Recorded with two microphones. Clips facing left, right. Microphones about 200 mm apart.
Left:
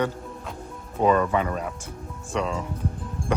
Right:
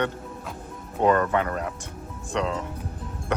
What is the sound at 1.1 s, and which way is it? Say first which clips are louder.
Speech: left 1 dB; 10° left (ahead or behind).